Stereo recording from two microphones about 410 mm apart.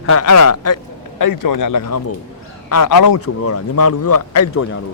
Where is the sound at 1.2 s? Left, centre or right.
Left.